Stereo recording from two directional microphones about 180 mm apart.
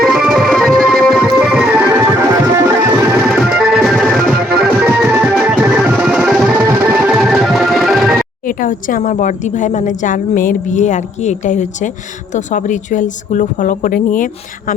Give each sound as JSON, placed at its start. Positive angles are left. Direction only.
{"t": 0.0, "sound": "music", "side_deg": 0}
{"t": 3.2, "sound": "music", "side_deg": -5}
{"t": 8.4, "sound": "a woman's voice", "side_deg": 50}